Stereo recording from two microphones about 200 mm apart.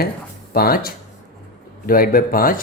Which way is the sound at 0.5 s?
50° left (ahead or behind).